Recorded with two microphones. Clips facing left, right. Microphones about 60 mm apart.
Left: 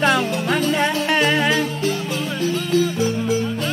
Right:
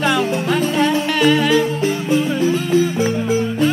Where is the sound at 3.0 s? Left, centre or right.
Right.